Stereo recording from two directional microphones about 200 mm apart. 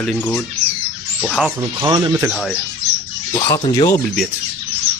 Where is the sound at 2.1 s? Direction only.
10° right (ahead or behind).